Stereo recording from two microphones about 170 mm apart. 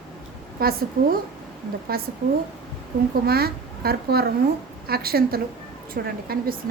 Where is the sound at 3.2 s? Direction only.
65° right (ahead or behind).